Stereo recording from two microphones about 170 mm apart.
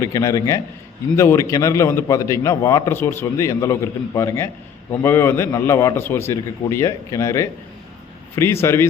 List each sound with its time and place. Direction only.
0.0 s a man's voice: 20° left (ahead or behind)
8.6 s a man's voice: 15° left (ahead or behind)